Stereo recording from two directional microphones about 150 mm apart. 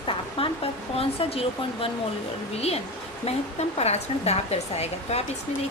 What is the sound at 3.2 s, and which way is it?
Speech, 45° left (ahead or behind).